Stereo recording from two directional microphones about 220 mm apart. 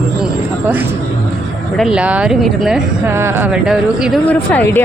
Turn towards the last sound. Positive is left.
turn(degrees=10)  # may be behind; listen again after turning